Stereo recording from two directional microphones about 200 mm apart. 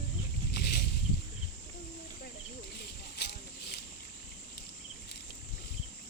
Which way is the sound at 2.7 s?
55° left (ahead or behind).